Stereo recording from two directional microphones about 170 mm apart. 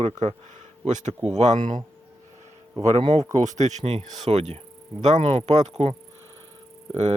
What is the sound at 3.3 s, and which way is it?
Speech, 45° right (ahead or behind).